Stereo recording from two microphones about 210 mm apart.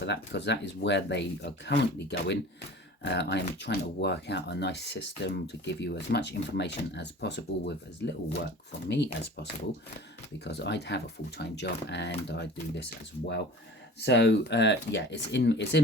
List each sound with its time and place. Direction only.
0.0 s speech: 55° left (ahead or behind)
14.0 s speech: 55° left (ahead or behind)